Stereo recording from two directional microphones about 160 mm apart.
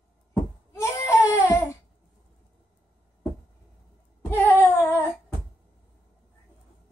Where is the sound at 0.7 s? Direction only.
15° left (ahead or behind).